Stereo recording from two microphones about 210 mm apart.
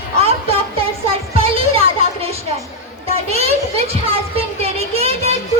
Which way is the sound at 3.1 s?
30° right (ahead or behind).